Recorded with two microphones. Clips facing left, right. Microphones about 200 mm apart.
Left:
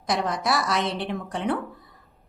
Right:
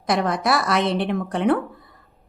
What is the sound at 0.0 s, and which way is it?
A woman's voice, 60° right (ahead or behind).